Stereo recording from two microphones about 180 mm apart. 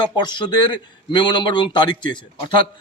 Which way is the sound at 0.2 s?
25° left (ahead or behind).